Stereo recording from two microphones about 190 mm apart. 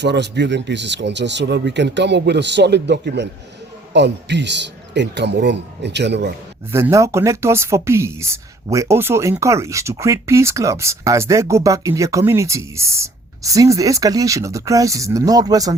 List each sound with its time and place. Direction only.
0.0 s speech: 65° right (ahead or behind)
6.7 s speech: 15° right (ahead or behind)